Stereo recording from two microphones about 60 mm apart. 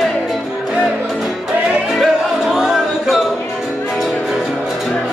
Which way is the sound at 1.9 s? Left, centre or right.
Centre.